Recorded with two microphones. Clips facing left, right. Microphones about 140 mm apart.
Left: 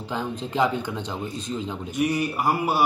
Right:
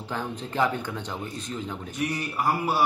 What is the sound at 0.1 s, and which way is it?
A man's voice, 20° left (ahead or behind).